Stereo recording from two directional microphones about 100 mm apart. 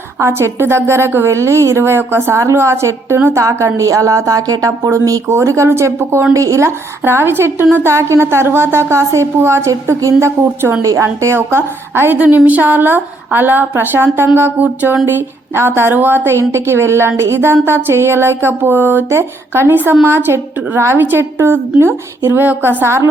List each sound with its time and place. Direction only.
0.2 s a woman's voice: 25° right (ahead or behind)